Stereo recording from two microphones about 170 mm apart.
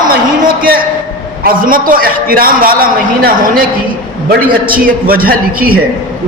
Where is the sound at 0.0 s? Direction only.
55° right (ahead or behind).